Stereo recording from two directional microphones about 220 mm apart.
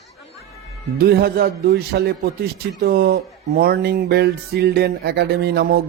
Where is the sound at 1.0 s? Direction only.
45° right (ahead or behind).